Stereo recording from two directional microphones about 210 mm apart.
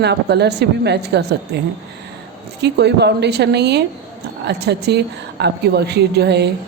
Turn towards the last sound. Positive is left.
turn(degrees=-50)  # may be behind; listen again after turning